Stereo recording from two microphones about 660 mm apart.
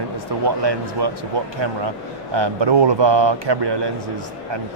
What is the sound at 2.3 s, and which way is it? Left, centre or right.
Speech, right.